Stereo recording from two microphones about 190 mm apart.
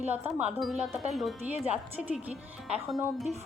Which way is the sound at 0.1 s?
10° right (ahead or behind).